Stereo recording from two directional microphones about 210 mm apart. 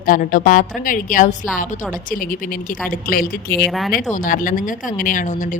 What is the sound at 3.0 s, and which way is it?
Speech, 40° left (ahead or behind).